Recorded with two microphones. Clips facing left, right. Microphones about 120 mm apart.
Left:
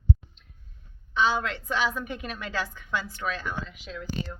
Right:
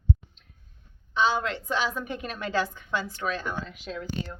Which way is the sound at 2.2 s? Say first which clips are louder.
Right 4 dB; 40° right (ahead or behind).